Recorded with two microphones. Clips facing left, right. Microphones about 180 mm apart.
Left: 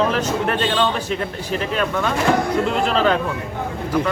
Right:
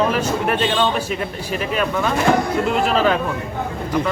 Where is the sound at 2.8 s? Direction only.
5° right (ahead or behind).